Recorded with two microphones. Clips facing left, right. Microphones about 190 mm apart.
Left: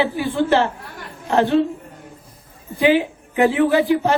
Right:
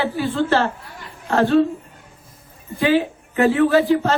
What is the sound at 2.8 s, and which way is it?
A man's voice, 15° left (ahead or behind).